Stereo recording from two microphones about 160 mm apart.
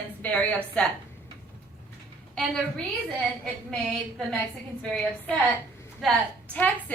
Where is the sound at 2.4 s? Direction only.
5° left (ahead or behind).